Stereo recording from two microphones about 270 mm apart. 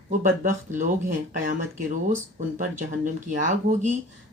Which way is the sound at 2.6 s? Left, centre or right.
Right.